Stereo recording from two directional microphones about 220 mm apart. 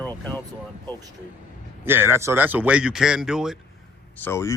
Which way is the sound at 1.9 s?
10° right (ahead or behind).